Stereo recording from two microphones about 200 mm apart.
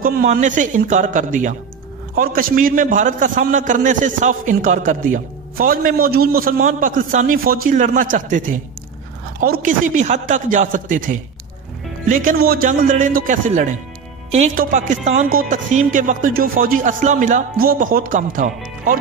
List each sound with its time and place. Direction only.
0.0 s a man's voice: 45° right (ahead or behind)